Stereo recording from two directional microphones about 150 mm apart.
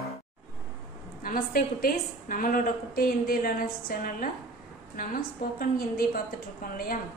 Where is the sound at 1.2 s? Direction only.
70° left (ahead or behind).